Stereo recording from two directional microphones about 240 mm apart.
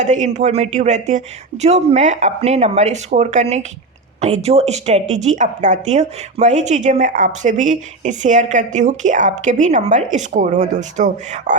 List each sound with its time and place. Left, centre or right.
0.0 s a woman's voice: right